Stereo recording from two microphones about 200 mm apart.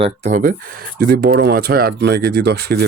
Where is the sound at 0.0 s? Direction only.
35° right (ahead or behind).